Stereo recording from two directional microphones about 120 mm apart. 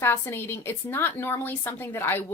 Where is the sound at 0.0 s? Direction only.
20° left (ahead or behind).